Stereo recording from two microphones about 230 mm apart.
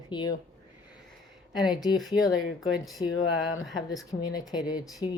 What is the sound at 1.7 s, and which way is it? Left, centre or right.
Speech, centre.